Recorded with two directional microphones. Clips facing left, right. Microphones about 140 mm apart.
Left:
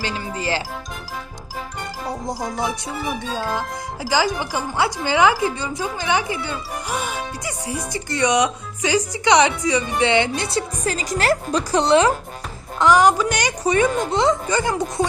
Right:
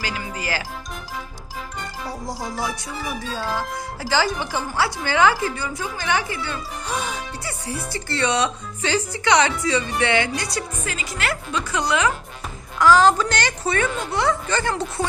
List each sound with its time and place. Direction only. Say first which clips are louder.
0.0 s speech: left 3 dB; 30° left (ahead or behind)
2.0 s music: left 4 dB; 20° left (ahead or behind)
3.3 s speech: left 1 dB; 15° left (ahead or behind)
10.8 s a woman's voice: left 10 dB; 40° left (ahead or behind)
12.8 s speech: even; 15° left (ahead or behind)